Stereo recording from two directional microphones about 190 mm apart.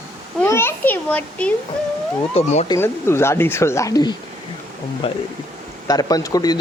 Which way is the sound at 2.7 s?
15° left (ahead or behind).